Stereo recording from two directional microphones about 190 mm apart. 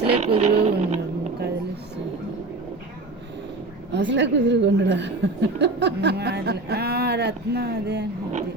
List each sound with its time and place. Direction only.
0.0 s vehicle: 30° right (ahead or behind)
3.9 s a woman's voice: 65° right (ahead or behind)